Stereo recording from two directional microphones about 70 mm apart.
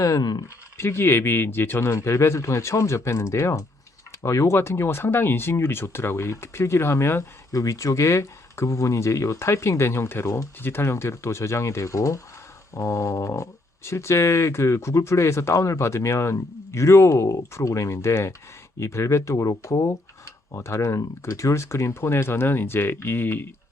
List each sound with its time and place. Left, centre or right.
0.2 s speech: left
0.4 s speech: left
7.5 s speech: left
10.2 s speech: left
10.6 s speech: left